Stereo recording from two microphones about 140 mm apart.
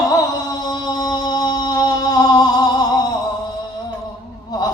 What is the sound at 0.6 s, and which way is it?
Mantra, 30° left (ahead or behind).